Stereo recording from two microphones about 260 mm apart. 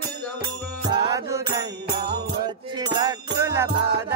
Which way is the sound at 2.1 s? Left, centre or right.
Right.